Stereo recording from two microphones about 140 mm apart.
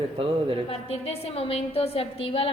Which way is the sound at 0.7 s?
45° left (ahead or behind).